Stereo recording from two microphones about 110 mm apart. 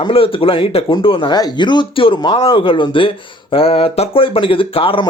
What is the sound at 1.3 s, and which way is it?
Speech, 40° left (ahead or behind).